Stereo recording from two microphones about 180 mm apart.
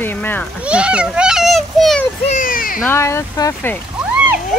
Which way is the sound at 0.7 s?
5° right (ahead or behind).